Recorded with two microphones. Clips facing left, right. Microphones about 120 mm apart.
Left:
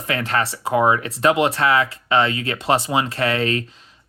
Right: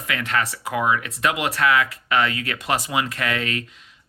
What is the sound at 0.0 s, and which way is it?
Speech, 35° left (ahead or behind).